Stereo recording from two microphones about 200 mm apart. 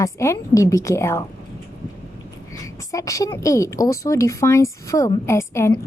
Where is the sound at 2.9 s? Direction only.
15° left (ahead or behind).